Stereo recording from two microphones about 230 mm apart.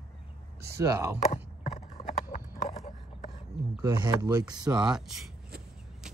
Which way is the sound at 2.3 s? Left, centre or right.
Left.